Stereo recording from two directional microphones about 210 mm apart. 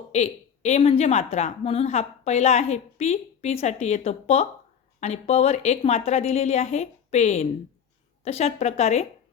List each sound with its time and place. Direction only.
0.1 s a woman's voice: 30° left (ahead or behind)